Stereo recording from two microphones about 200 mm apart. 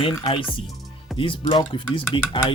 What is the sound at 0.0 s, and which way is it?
Speech, 25° left (ahead or behind).